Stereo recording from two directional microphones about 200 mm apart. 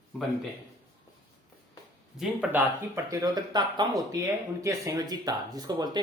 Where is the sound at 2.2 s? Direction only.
10° right (ahead or behind).